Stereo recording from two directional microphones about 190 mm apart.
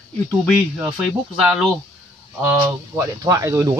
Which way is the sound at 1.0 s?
Centre (ahead or behind).